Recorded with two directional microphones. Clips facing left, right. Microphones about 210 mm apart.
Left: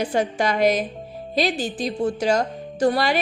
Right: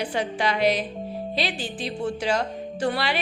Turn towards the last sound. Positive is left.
turn(degrees=40)  # may be behind; listen again after turning